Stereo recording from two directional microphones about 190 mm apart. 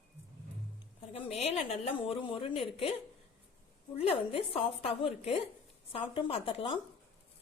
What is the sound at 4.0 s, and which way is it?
A woman's voice, 30° left (ahead or behind).